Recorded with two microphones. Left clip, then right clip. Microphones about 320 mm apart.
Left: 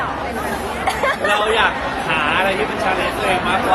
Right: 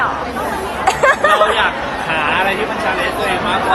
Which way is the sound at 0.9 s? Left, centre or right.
Right.